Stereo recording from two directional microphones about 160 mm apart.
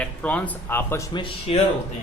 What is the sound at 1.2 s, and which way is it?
Speech, 40° left (ahead or behind).